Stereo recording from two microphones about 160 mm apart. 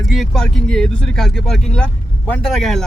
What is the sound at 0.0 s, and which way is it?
Speech, centre (ahead or behind).